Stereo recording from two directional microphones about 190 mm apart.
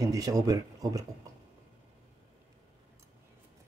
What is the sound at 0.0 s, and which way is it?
Speech, 20° right (ahead or behind).